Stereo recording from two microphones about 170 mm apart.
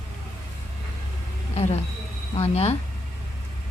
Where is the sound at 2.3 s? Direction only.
35° left (ahead or behind).